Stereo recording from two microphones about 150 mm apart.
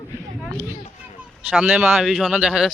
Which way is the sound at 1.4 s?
5° right (ahead or behind).